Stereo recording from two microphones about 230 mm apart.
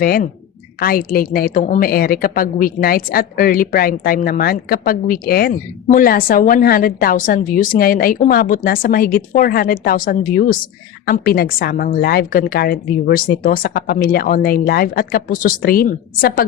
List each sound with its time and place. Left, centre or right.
0.0 s a woman's voice: left